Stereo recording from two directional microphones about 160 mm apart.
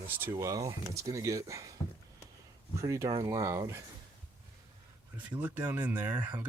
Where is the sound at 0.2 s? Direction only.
15° right (ahead or behind).